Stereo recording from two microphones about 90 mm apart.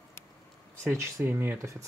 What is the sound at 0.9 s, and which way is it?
Speech, 30° right (ahead or behind).